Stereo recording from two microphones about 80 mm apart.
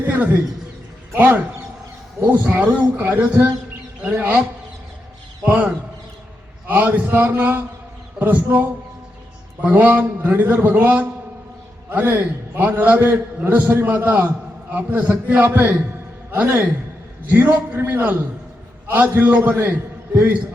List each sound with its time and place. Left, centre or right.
0.0 s a man's voice: right
5.4 s a man's voice: right